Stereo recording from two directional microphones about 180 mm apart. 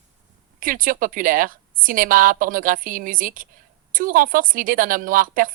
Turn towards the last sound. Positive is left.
turn(degrees=-50)  # may be behind; listen again after turning